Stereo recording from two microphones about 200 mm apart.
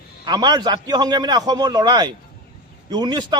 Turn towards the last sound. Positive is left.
turn(degrees=-20)  # may be behind; listen again after turning